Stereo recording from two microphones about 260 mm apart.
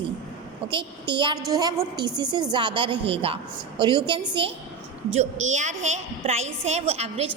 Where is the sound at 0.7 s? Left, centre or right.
Centre.